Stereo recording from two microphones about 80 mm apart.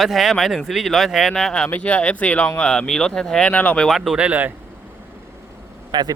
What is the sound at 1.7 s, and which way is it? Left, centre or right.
Speech, centre.